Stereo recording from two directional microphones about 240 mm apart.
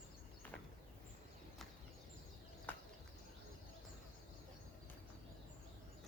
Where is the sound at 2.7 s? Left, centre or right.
Centre.